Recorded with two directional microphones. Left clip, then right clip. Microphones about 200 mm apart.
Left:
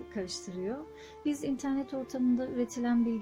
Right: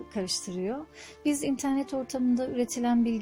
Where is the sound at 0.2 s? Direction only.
30° right (ahead or behind).